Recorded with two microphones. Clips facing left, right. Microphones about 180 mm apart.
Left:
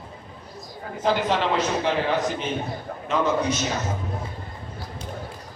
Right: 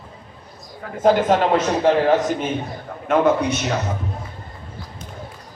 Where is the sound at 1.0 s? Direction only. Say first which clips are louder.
Right 7 dB; 45° right (ahead or behind).